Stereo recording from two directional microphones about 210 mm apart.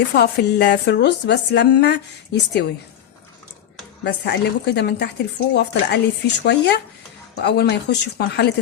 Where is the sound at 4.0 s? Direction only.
55° left (ahead or behind).